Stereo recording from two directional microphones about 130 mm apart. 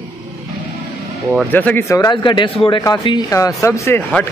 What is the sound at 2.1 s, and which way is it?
Speech, 35° left (ahead or behind).